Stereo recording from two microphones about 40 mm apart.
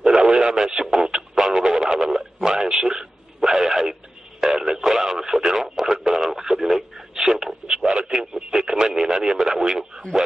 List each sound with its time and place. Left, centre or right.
0.0 s radio: centre